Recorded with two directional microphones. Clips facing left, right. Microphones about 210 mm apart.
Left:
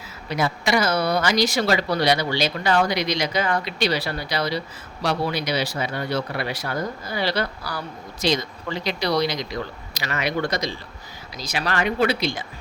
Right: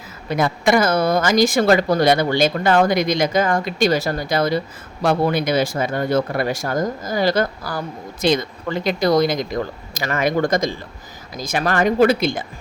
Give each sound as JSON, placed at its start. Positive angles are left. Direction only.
{"t": 0.3, "sound": "speech", "side_deg": -50}